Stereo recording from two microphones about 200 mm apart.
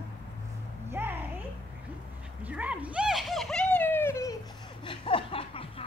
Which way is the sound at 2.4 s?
5° right (ahead or behind).